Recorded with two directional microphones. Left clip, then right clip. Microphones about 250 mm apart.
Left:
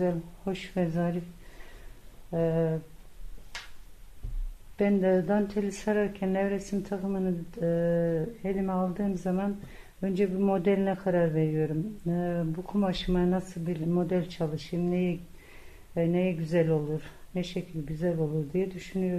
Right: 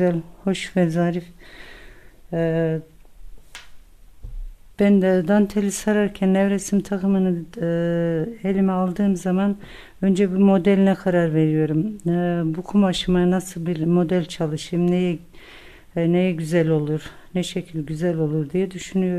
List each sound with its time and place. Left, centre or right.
0.0 s speech: right
2.3 s speech: right
4.7 s speech: right